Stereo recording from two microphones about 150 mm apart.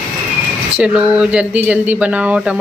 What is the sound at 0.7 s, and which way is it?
Speech, 10° right (ahead or behind).